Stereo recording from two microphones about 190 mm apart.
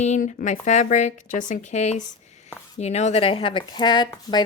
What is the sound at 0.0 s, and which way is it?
Speech, 35° left (ahead or behind).